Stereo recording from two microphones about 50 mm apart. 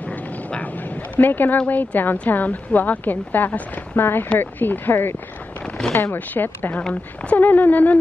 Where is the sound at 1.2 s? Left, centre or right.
Left.